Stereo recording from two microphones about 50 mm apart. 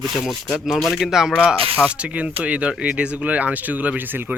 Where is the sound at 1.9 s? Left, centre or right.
Right.